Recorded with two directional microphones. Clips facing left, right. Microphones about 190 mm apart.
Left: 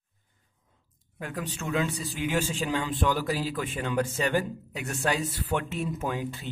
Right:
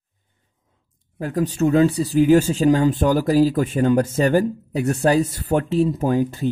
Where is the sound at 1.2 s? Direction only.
40° right (ahead or behind).